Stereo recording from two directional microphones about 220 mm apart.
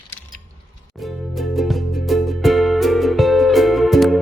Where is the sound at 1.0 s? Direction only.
Centre (ahead or behind).